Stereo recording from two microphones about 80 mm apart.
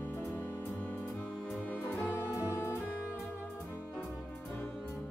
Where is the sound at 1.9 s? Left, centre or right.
Left.